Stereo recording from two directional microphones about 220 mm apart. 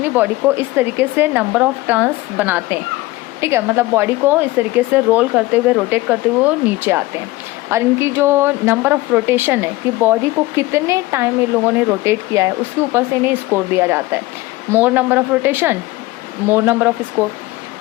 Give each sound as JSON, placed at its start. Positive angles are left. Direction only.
{"t": 0.0, "sound": "a woman's voice", "side_deg": -10}